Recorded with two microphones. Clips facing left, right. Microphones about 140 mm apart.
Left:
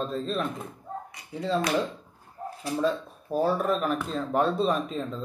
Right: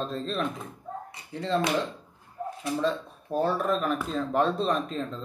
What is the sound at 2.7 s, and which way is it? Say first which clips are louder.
Speech: left 2 dB; 5° left (ahead or behind).